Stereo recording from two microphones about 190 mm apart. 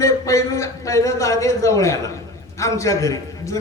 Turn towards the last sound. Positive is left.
turn(degrees=15)  # may be behind; listen again after turning